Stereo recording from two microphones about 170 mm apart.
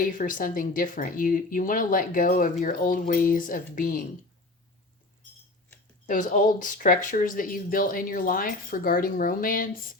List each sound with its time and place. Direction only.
0.0 s speech: 55° left (ahead or behind)
6.1 s speech: 50° left (ahead or behind)